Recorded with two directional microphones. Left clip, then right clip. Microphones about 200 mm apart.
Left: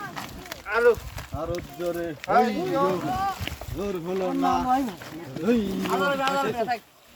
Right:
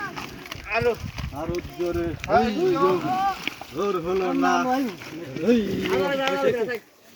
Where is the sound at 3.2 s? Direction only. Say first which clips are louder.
Right 4 dB; 10° left (ahead or behind).